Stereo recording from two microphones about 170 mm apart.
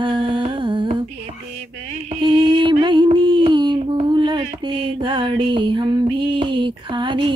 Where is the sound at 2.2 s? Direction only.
30° right (ahead or behind).